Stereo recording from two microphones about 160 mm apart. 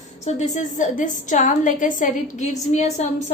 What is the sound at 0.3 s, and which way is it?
A woman's voice, 45° left (ahead or behind).